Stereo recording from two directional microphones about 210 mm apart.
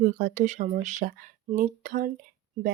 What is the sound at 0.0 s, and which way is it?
Speech, 35° right (ahead or behind).